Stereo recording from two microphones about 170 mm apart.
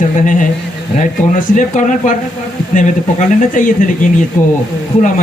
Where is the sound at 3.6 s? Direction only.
50° left (ahead or behind).